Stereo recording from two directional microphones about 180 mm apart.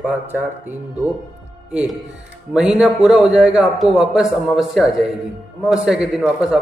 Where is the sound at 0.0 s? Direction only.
10° right (ahead or behind).